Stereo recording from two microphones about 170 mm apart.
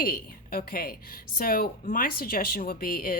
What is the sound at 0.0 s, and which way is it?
A woman's voice, 60° left (ahead or behind).